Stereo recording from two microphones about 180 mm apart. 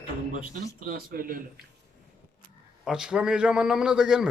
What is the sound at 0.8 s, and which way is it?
Speech, 55° right (ahead or behind).